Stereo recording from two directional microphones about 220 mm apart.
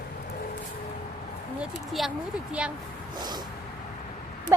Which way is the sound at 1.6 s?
Centre (ahead or behind).